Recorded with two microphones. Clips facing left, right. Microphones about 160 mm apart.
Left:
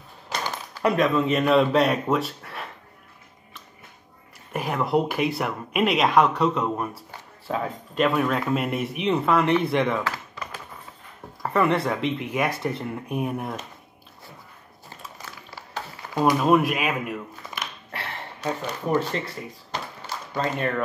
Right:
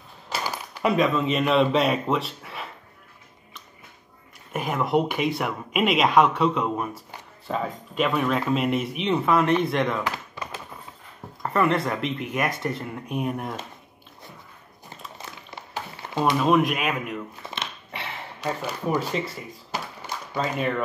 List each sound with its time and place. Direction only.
0.3 s speech: 10° right (ahead or behind)
4.5 s speech: centre (ahead or behind)
10.0 s a sound: 20° right (ahead or behind)
11.4 s speech: 5° left (ahead or behind)
15.1 s a sound: 20° right (ahead or behind)
16.3 s speech: centre (ahead or behind)
17.5 s dog: 25° right (ahead or behind)
17.9 s a sound: centre (ahead or behind)
18.9 s speech: centre (ahead or behind)